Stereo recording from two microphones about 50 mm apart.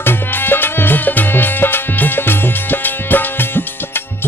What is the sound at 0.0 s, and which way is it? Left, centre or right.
Music, left.